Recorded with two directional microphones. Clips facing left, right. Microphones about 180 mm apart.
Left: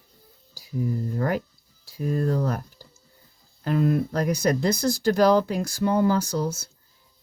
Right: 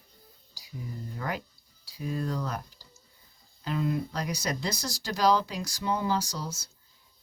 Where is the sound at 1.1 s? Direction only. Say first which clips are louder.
Left 5 dB; 45° left (ahead or behind).